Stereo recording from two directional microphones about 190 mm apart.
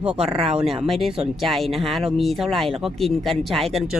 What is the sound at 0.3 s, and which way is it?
Speech, 35° right (ahead or behind).